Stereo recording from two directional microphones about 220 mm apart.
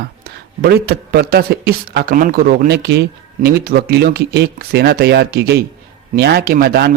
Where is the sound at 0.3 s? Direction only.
45° right (ahead or behind).